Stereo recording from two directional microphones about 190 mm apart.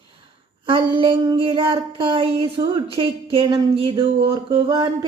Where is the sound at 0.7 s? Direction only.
25° right (ahead or behind).